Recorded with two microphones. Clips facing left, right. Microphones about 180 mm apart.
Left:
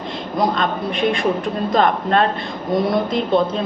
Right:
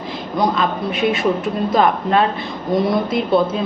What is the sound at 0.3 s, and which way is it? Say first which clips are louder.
Speech: right 1 dB; centre (ahead or behind).